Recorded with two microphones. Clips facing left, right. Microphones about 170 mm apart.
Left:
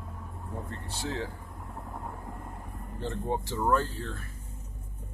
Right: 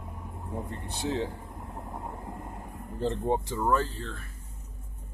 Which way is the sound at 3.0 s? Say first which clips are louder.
Right 5 dB; 30° right (ahead or behind).